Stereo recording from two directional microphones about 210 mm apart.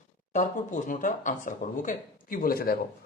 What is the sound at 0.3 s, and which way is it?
A man's voice, 35° left (ahead or behind).